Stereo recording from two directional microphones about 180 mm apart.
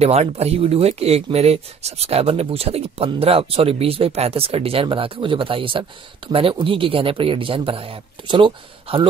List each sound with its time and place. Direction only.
0.0 s speech: 35° right (ahead or behind)